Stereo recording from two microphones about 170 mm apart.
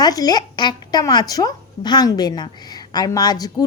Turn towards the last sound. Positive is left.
turn(degrees=20)  # may be behind; listen again after turning